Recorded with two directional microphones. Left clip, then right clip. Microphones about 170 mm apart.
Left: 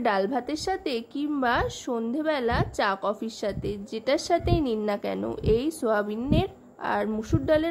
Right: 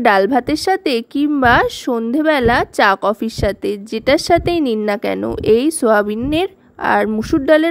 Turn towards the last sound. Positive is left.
turn(degrees=-45)  # may be behind; listen again after turning